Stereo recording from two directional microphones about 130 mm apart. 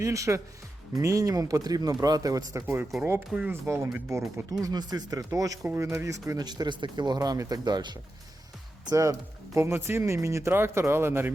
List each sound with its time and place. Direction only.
0.0 s speech: 25° right (ahead or behind)
4.6 s speech: 30° right (ahead or behind)